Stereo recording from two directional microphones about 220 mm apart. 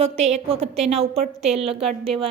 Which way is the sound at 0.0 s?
30° right (ahead or behind).